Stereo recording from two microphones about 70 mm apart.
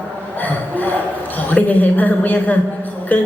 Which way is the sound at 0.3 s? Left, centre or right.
Left.